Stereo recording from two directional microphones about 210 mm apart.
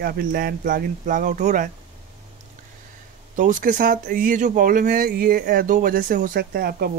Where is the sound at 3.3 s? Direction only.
40° right (ahead or behind).